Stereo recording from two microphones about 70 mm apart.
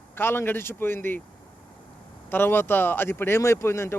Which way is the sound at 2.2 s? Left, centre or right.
Left.